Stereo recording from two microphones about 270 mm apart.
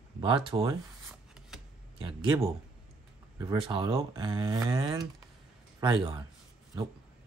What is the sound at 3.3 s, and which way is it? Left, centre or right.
Speech, centre.